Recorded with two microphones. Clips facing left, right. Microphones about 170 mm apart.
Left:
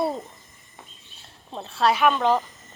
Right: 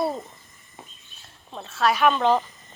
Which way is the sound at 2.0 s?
5° left (ahead or behind).